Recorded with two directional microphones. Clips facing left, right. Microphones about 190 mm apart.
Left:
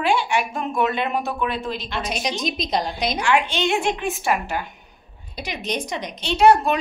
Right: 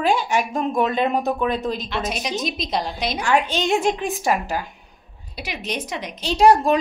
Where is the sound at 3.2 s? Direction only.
40° right (ahead or behind).